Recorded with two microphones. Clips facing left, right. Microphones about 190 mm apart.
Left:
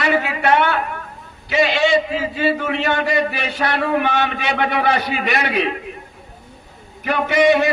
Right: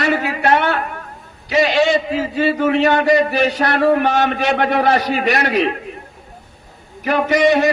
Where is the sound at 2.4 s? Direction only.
50° right (ahead or behind).